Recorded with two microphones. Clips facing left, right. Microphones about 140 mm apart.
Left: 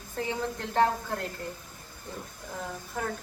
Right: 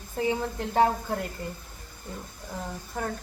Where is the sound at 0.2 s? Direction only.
15° right (ahead or behind).